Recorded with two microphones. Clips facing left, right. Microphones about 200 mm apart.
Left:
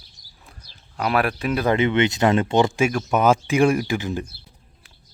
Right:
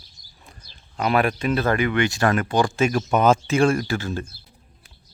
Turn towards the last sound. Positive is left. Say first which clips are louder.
# left 1 dB
turn(degrees=15)  # may be behind; listen again after turning